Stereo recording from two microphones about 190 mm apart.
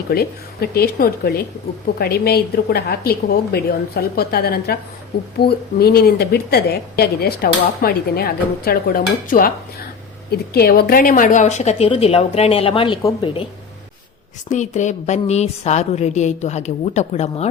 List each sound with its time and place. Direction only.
0.1 s a woman's voice: 55° left (ahead or behind); by 13.0 s 30° left (ahead or behind)
13.0 s a woman's voice: 15° left (ahead or behind)
14.5 s a woman's voice: 40° left (ahead or behind)